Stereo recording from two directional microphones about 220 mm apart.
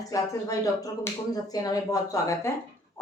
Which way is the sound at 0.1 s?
15° left (ahead or behind).